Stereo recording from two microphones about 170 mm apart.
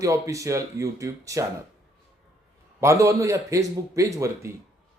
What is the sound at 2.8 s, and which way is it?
Speech, 15° right (ahead or behind).